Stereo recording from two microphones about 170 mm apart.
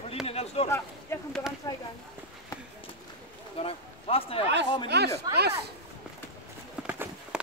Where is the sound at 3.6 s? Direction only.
35° left (ahead or behind).